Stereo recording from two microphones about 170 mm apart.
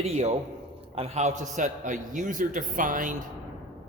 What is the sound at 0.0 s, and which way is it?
A man's voice, 40° right (ahead or behind).